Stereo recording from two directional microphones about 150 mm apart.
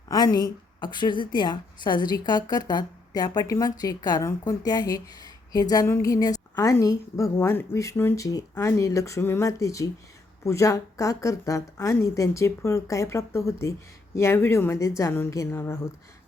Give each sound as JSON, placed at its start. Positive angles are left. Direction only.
{"t": 0.1, "sound": "a woman's voice", "side_deg": 25}